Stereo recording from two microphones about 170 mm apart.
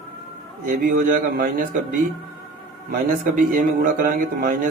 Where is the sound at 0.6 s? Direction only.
55° right (ahead or behind).